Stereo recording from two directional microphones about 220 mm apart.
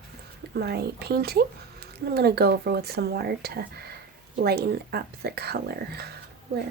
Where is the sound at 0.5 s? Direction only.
45° right (ahead or behind).